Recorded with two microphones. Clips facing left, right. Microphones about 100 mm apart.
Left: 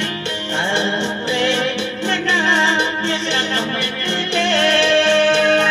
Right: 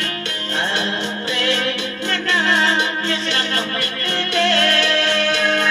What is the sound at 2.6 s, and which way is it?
Music, 25° left (ahead or behind).